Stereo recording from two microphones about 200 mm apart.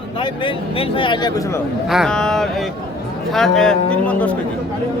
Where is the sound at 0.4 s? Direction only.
25° left (ahead or behind).